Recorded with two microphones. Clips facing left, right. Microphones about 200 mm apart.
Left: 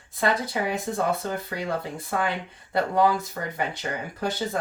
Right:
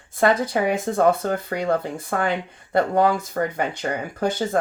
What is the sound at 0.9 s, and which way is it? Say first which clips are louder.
Speech: right 7 dB; 60° right (ahead or behind).